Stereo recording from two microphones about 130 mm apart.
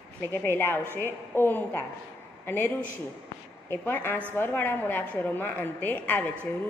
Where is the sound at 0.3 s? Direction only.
15° left (ahead or behind).